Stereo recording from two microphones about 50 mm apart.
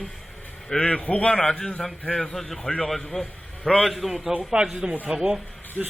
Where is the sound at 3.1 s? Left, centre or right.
Centre.